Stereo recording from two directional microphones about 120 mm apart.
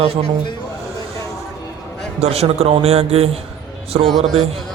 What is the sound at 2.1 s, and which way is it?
A man's voice, 60° right (ahead or behind).